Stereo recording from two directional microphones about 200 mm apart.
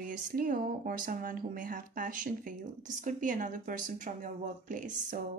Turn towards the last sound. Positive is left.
turn(degrees=-40)  # may be behind; listen again after turning